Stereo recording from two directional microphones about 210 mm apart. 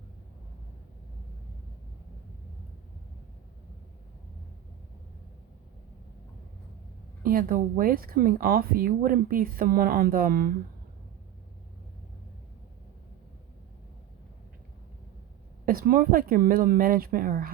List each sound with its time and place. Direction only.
7.2 s speech: 45° right (ahead or behind)
15.6 s speech: 45° right (ahead or behind)